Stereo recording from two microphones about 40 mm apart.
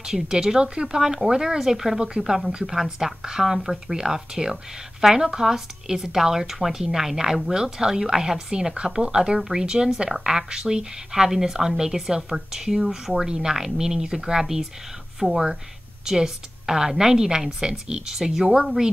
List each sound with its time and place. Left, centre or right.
0.0 s speech: centre
2.0 s speech: centre
2.3 s speech: centre